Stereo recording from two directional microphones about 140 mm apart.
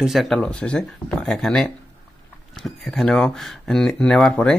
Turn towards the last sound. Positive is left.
turn(degrees=5)  # may be behind; listen again after turning